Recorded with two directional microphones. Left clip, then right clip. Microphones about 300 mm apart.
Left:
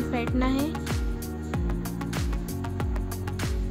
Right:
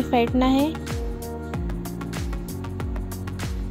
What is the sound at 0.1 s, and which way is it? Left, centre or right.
Speech, centre.